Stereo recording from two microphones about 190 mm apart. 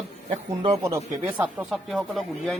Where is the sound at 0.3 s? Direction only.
30° right (ahead or behind).